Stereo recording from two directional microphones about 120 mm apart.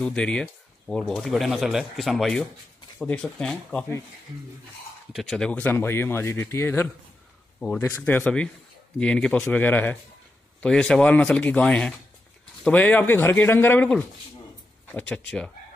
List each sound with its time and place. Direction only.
0.0 s speech: 10° left (ahead or behind)
5.1 s speech: centre (ahead or behind)